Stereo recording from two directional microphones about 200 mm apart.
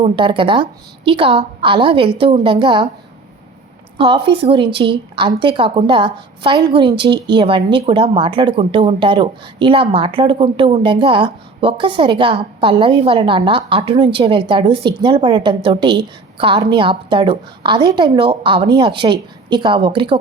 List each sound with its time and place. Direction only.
0.0 s speech: 25° right (ahead or behind)
3.9 s a woman's voice: 25° right (ahead or behind)